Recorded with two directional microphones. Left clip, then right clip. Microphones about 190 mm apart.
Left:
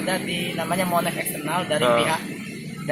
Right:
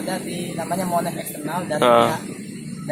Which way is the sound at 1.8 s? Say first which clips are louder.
Right 6 dB; 45° right (ahead or behind).